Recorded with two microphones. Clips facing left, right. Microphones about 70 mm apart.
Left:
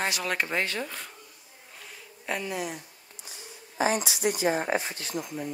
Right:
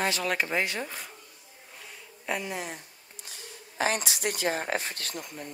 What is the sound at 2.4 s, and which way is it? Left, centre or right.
Speech, right.